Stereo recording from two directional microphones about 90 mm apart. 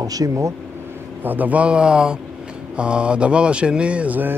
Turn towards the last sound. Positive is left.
turn(degrees=-20)  # may be behind; listen again after turning